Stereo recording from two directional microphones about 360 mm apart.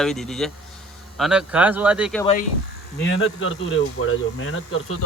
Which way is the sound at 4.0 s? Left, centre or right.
Left.